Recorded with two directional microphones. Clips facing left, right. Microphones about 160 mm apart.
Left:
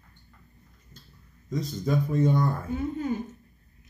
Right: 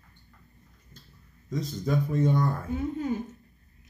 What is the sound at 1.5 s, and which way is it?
Speech, 15° left (ahead or behind).